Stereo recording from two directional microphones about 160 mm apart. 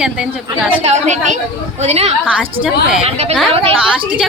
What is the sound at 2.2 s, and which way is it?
Speech, 5° right (ahead or behind).